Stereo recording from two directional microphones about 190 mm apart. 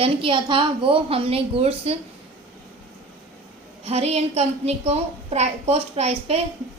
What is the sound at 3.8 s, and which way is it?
A woman's voice, 35° right (ahead or behind).